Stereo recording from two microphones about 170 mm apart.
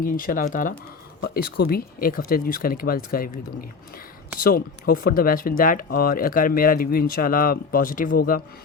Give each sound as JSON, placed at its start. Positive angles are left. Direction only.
{"t": 0.0, "sound": "speech", "side_deg": 55}
{"t": 1.2, "sound": "speech", "side_deg": 65}